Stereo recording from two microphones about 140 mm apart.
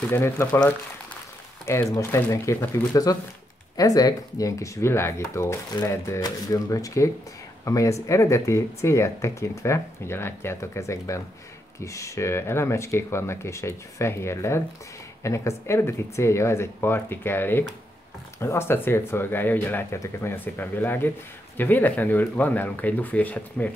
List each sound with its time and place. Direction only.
0.0 s speech: 15° left (ahead or behind)
1.7 s speech: 20° left (ahead or behind)